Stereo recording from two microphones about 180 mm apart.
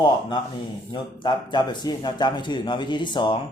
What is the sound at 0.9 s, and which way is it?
A man's voice, 25° left (ahead or behind).